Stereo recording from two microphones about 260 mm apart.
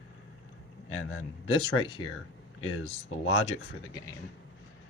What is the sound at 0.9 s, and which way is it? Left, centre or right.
Speech, left.